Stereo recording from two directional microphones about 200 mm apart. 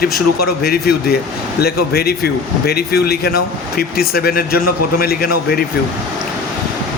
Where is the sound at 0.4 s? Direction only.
50° left (ahead or behind).